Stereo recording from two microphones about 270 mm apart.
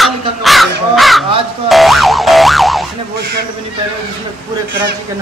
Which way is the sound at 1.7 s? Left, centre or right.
Centre.